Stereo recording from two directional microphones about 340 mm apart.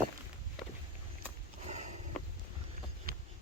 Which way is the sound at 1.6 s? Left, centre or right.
Centre.